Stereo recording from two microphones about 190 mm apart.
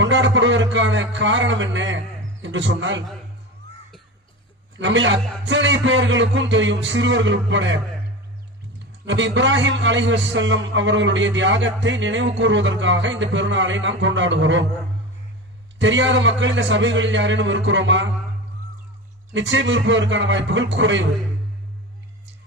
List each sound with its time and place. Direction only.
0.0 s a man's voice: 75° right (ahead or behind)
4.8 s a man's voice: 75° right (ahead or behind)
9.0 s a man's voice: 75° right (ahead or behind)
15.8 s a man's voice: 75° right (ahead or behind)
19.3 s a man's voice: 75° right (ahead or behind)